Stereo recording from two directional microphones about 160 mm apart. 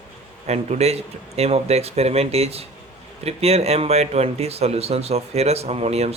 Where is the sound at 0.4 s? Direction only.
40° right (ahead or behind).